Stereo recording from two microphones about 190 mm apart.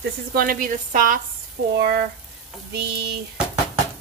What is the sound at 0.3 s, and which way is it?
A woman's voice, 50° right (ahead or behind).